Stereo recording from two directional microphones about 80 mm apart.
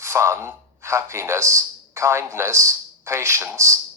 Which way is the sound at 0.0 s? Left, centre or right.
Right.